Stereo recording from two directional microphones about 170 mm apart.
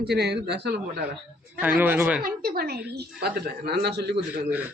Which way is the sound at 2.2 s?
60° right (ahead or behind).